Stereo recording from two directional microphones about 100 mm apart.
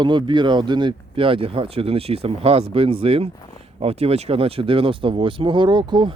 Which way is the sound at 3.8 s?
80° right.